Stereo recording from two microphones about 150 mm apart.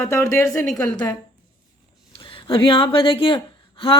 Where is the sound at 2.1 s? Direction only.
35° left (ahead or behind).